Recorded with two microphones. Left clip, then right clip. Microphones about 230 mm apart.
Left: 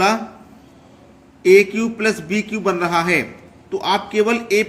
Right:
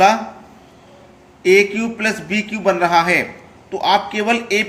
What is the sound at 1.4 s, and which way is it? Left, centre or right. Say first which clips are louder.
A man's voice: left 1 dB; left.